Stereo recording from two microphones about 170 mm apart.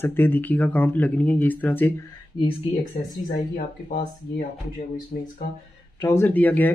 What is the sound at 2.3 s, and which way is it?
Speech, 30° left (ahead or behind).